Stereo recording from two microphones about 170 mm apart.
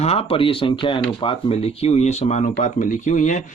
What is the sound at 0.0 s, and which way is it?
Speech, 35° left (ahead or behind).